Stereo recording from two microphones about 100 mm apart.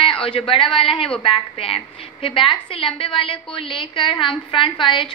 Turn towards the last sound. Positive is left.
turn(degrees=60)  # may be behind; listen again after turning